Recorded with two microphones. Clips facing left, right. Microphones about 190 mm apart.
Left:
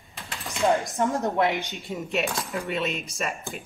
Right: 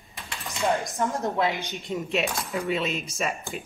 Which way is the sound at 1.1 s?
15° left (ahead or behind).